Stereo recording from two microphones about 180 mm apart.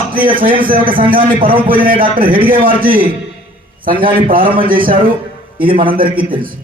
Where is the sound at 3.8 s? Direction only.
50° right (ahead or behind).